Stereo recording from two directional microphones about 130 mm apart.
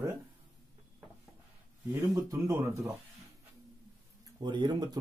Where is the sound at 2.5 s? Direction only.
20° right (ahead or behind).